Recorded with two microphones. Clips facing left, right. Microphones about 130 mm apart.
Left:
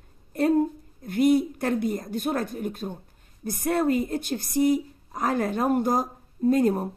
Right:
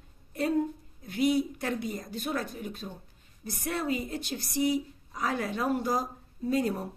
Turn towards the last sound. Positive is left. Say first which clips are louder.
# left 7 dB
turn(degrees=50)  # may be behind; listen again after turning